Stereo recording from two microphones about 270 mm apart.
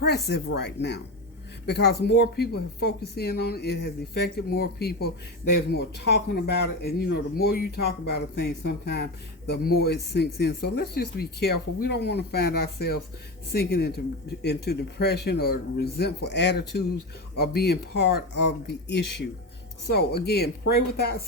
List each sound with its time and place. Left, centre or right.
0.0 s speech: left
19.9 s speech: left